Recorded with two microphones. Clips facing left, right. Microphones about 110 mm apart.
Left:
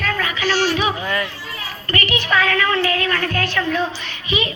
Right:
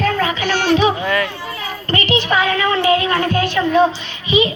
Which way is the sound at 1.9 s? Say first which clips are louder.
Right 3 dB; 25° right (ahead or behind).